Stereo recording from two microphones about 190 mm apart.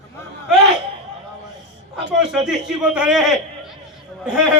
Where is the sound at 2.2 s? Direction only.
5° right (ahead or behind).